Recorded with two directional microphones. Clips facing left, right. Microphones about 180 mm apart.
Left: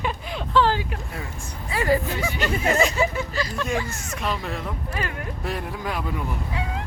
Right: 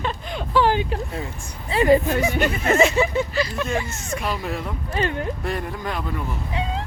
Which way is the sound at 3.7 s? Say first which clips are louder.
Right 1 dB; 20° right (ahead or behind).